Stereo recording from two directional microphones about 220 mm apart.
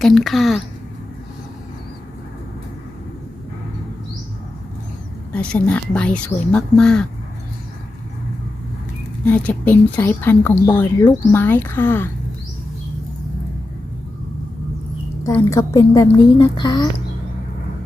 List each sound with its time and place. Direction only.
0.0 s speech: centre (ahead or behind)
5.3 s speech: 5° left (ahead or behind)
9.2 s speech: 5° left (ahead or behind)
15.2 s speech: 15° left (ahead or behind)